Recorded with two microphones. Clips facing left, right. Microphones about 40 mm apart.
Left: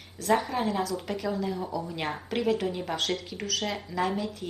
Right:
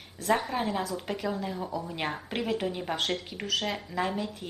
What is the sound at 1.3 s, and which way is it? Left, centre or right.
A woman's voice, centre.